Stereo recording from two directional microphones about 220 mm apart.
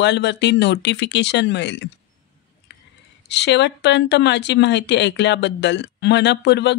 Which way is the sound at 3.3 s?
50° left (ahead or behind).